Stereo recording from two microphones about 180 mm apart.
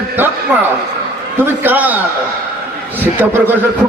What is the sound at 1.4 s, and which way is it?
Speech, 10° right (ahead or behind).